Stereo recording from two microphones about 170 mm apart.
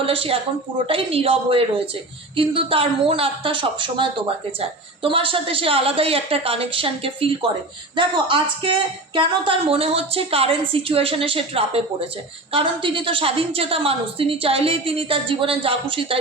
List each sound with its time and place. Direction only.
0.0 s speech: 30° right (ahead or behind)